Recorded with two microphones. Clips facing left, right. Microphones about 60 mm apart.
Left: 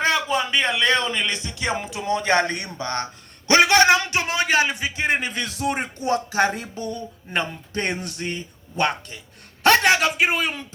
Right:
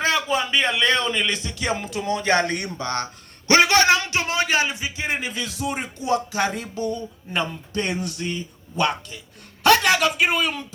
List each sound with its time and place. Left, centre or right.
0.0 s speech: centre; by 3.1 s left
3.8 s speech: left
6.1 s a man's voice: left